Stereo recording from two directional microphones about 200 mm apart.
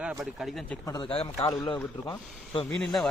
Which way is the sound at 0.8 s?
20° left (ahead or behind).